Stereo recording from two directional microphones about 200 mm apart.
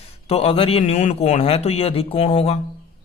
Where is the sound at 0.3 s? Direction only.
30° left (ahead or behind).